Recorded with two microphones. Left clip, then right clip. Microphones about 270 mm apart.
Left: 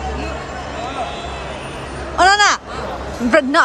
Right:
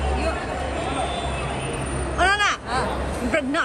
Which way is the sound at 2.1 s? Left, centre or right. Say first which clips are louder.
Left 8 dB; centre.